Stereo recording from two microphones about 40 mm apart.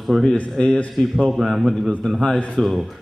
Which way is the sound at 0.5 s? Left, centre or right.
Centre.